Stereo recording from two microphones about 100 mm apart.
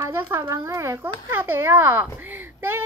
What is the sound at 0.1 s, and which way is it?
Speech, 25° right (ahead or behind).